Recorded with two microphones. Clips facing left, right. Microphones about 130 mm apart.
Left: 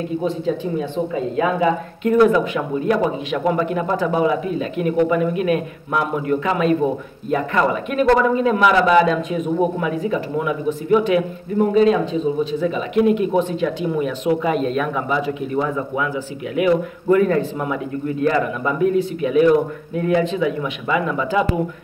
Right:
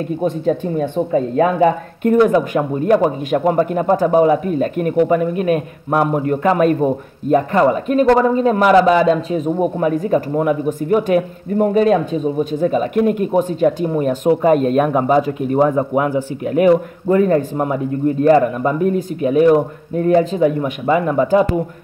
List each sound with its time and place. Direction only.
0.2 s a man's voice: 50° right (ahead or behind)